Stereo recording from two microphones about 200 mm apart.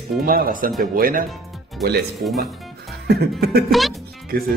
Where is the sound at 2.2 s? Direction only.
55° right (ahead or behind).